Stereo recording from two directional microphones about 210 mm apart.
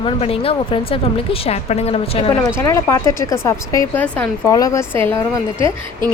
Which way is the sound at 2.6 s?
15° left (ahead or behind).